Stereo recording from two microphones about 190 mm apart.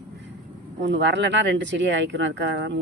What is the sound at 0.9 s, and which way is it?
Speech, 70° right (ahead or behind).